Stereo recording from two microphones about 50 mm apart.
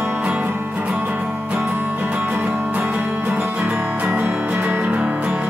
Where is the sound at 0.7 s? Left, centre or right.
Right.